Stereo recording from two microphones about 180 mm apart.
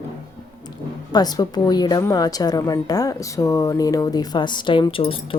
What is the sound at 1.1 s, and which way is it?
Speech, 20° left (ahead or behind).